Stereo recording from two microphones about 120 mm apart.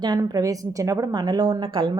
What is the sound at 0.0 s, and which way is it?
A woman's voice, 35° right (ahead or behind).